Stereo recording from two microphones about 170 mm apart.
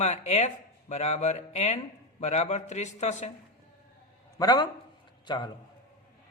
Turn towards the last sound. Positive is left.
turn(degrees=25)  # may be behind; listen again after turning